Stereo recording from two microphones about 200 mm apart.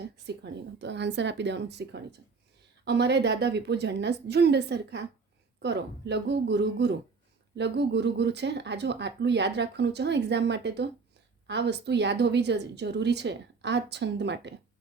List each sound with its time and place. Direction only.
0.0 s speech: 60° right (ahead or behind)